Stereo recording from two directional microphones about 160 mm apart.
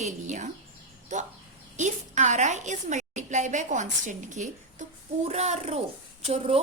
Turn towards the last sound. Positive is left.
turn(degrees=-35)  # may be behind; listen again after turning